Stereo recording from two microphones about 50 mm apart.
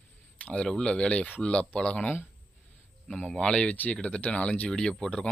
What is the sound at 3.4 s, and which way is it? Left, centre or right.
Speech, centre.